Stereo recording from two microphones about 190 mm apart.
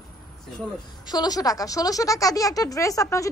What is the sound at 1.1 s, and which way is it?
Speech, 20° left (ahead or behind).